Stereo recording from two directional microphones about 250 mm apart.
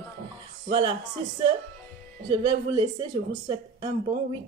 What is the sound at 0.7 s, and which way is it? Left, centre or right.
Speech, right.